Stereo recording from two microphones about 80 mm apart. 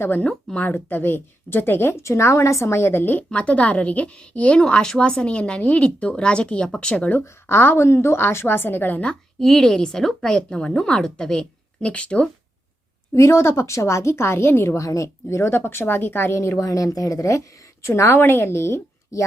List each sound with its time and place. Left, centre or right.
0.4 s speech: centre
0.7 s speech: left
3.2 s a woman's voice: centre
7.4 s a woman's voice: left
9.0 s a woman's voice: centre
13.1 s a woman's voice: left